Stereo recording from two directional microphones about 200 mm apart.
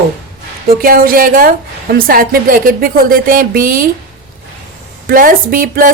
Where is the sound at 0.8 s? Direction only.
45° right (ahead or behind).